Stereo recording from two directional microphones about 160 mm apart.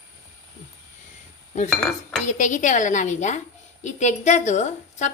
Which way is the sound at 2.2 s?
50° left (ahead or behind).